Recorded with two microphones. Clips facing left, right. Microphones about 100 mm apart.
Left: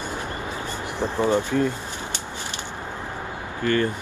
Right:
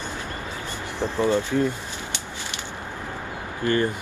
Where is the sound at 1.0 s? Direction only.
15° left (ahead or behind).